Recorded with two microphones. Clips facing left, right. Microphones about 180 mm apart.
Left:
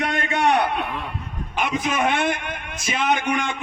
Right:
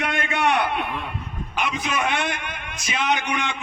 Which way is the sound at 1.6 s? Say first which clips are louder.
Left 3 dB; 45° left (ahead or behind).